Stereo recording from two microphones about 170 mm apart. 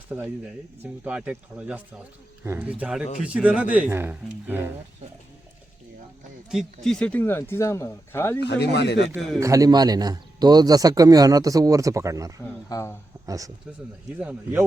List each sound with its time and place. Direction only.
0.1 s speech: 10° right (ahead or behind)
6.8 s speech: 5° left (ahead or behind)
8.4 s speech: 80° left
9.4 s a man's voice: 20° right (ahead or behind)
12.6 s speech: 20° left (ahead or behind)
13.2 s speech: 20° right (ahead or behind)
14.2 s speech: 10° right (ahead or behind)